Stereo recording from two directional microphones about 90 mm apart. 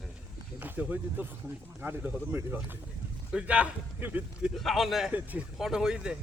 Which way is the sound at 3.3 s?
15° right (ahead or behind).